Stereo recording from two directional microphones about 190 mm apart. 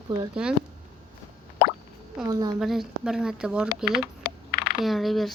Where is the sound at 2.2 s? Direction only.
20° right (ahead or behind).